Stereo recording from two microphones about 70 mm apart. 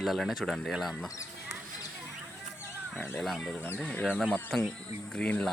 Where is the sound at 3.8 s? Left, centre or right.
Centre.